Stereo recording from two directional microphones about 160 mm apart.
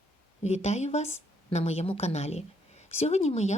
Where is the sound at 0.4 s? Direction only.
45° left (ahead or behind).